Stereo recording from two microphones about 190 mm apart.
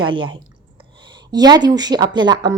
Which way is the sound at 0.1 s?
25° right (ahead or behind).